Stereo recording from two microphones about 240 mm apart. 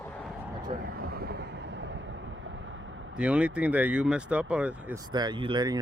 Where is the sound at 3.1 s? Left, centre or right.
Centre.